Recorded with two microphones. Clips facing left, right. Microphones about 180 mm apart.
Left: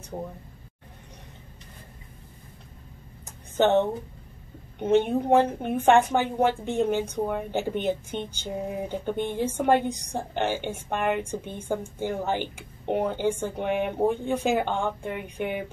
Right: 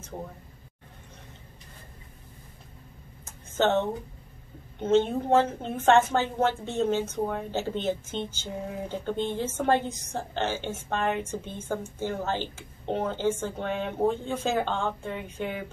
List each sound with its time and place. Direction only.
0.1 s speech: 20° left (ahead or behind)
3.3 s a sound: 15° left (ahead or behind)
4.7 s a woman's voice: 15° left (ahead or behind)